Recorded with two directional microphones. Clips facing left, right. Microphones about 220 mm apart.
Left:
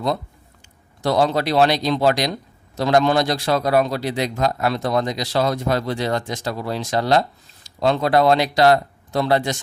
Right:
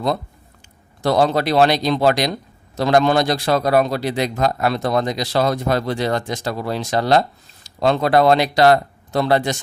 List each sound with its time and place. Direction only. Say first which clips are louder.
1.0 s a man's voice: right 2 dB; 50° right (ahead or behind)